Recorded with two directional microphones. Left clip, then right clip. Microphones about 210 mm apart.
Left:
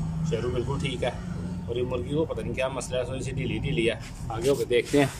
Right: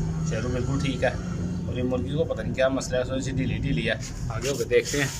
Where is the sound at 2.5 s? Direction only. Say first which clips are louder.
Right 5 dB; 10° left (ahead or behind).